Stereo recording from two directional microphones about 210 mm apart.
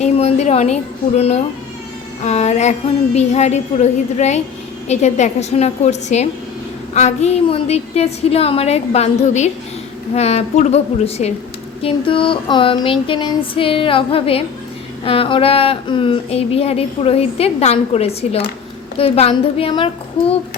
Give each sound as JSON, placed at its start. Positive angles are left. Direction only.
{"t": 0.0, "sound": "a woman's voice", "side_deg": 30}